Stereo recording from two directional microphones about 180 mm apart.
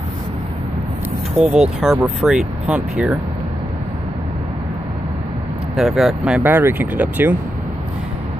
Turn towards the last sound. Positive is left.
turn(degrees=-10)  # may be behind; listen again after turning